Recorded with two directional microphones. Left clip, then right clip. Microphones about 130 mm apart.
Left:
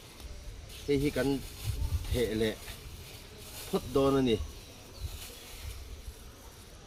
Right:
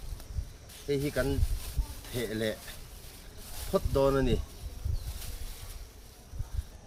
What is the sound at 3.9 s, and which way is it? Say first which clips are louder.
Speech: left 1 dB; 15° right (ahead or behind).